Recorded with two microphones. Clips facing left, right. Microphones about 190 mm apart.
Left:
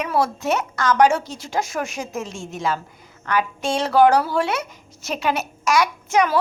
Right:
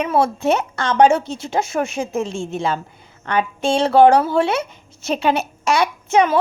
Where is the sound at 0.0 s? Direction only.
25° right (ahead or behind).